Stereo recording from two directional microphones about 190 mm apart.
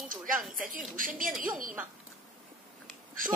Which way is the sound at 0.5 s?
45° right (ahead or behind).